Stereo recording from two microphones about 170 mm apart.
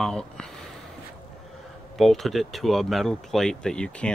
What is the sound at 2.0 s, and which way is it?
Speech, centre (ahead or behind).